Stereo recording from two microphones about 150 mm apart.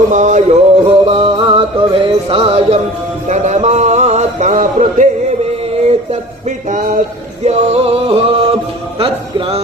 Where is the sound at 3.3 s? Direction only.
50° right (ahead or behind).